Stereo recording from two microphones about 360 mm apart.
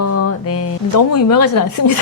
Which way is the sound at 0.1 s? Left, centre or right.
Left.